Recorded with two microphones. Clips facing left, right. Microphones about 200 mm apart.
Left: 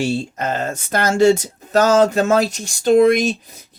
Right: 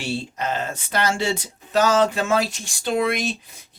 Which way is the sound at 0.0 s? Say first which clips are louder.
Left 6 dB; 45° left (ahead or behind).